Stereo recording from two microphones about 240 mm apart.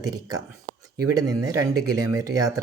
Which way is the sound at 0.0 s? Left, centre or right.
Centre.